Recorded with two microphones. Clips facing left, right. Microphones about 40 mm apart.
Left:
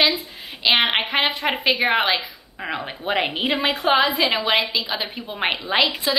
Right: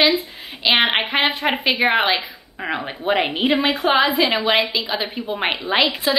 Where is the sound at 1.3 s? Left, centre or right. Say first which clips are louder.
Right 2 dB; centre.